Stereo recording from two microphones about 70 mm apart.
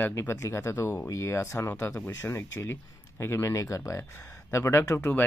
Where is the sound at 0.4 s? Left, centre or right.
Left.